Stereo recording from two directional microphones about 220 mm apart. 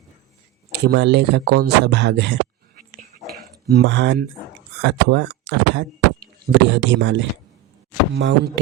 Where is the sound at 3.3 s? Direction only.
45° right (ahead or behind).